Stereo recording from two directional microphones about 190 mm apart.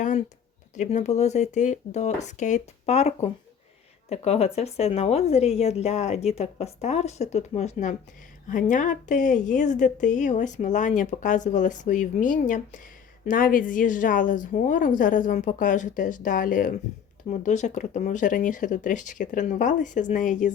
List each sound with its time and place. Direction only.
0.8 s a woman's voice: 35° left (ahead or behind)